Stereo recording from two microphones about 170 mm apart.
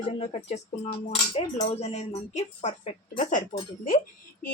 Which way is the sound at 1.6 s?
40° left (ahead or behind).